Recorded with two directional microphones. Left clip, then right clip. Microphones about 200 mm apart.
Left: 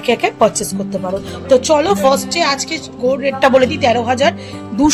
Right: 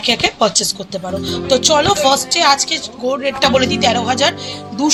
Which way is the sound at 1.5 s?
55° left (ahead or behind).